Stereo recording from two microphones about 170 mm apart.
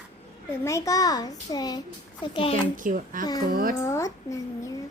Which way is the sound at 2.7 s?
50° right (ahead or behind).